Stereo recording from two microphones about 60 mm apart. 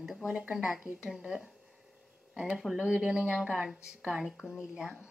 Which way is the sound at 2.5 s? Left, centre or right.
Centre.